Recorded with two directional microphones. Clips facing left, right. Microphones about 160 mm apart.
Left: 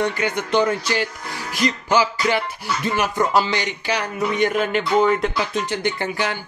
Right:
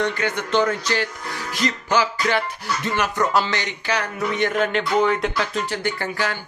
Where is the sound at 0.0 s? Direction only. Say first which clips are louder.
Left 1 dB; 15° left (ahead or behind).